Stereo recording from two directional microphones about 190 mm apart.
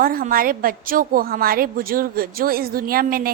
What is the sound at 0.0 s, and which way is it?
A woman's voice, 50° right (ahead or behind).